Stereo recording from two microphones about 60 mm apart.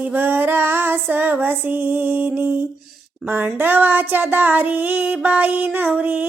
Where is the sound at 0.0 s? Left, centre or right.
Right.